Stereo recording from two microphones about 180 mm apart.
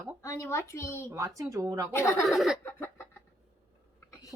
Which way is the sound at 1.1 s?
20° right (ahead or behind).